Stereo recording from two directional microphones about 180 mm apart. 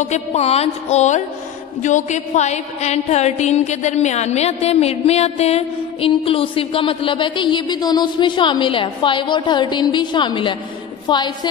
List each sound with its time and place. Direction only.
0.0 s a woman's voice: 40° left (ahead or behind)